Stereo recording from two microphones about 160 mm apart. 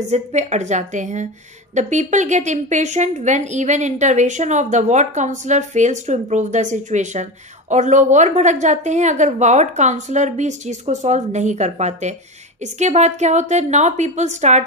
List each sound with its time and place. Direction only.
0.0 s a woman's voice: 45° right (ahead or behind)